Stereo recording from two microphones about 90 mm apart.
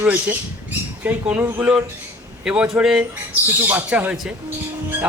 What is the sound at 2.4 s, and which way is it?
Speech, 15° right (ahead or behind).